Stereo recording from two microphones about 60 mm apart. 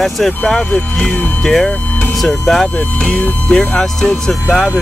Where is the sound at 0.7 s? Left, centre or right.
Left.